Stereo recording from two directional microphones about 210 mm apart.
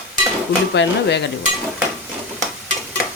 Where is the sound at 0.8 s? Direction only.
60° left (ahead or behind).